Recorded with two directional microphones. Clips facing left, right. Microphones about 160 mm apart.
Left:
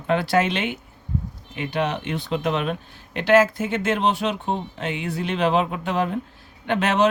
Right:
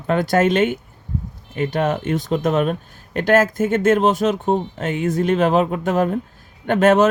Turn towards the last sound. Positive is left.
turn(degrees=-45)  # may be behind; listen again after turning